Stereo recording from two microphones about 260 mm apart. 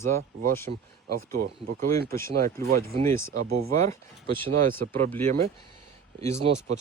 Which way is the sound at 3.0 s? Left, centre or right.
Centre.